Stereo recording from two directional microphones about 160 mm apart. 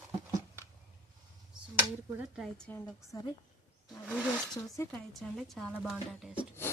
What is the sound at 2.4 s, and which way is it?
Speech, 5° left (ahead or behind).